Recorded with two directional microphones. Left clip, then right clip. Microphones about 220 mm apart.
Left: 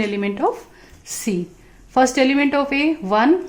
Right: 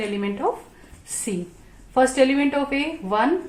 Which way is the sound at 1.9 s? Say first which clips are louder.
Left 2 dB; 40° left (ahead or behind).